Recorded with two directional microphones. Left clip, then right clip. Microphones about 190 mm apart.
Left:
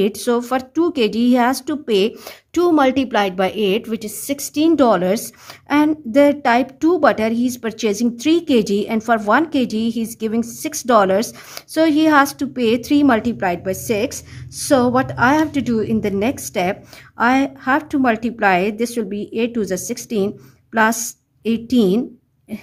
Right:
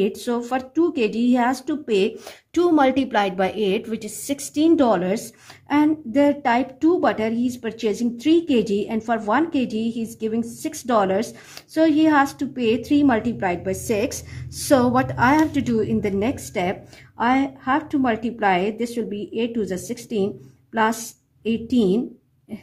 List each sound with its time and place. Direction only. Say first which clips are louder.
0.0 s a woman's voice: left 5 dB; 40° left (ahead or behind)